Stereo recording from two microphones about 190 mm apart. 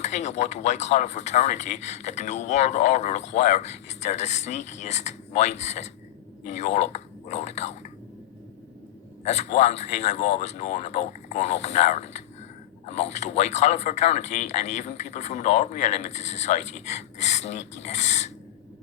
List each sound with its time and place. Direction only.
0.0 s speech: 35° left (ahead or behind)
9.2 s speech: 35° left (ahead or behind)